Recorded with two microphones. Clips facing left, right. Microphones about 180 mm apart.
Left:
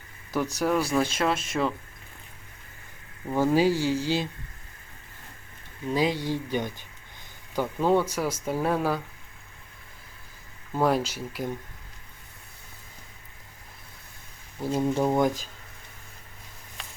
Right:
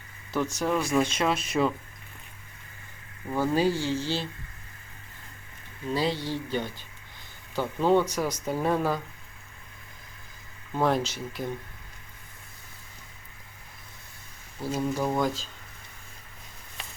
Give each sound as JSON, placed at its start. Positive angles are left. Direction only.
{"t": 0.6, "sound": "speech", "side_deg": 5}
{"t": 3.2, "sound": "speech", "side_deg": 15}
{"t": 5.9, "sound": "speech", "side_deg": 15}
{"t": 10.8, "sound": "speech", "side_deg": 10}
{"t": 14.6, "sound": "speech", "side_deg": 20}